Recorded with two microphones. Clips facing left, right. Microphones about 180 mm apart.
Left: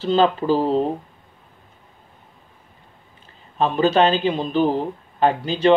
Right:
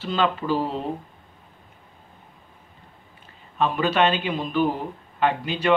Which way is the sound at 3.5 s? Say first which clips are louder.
Left 4 dB; 30° left (ahead or behind).